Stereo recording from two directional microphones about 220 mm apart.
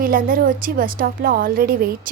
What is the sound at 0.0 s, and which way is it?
A woman's voice, 40° right (ahead or behind).